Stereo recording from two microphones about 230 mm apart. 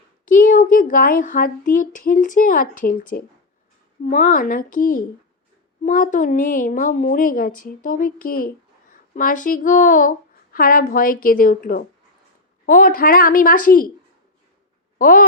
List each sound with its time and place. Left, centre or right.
0.3 s a woman's voice: left
14.9 s speech: left